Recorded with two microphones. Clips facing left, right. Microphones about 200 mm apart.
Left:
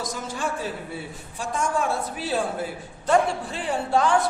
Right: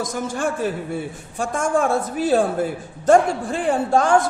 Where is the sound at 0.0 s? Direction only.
50° right (ahead or behind).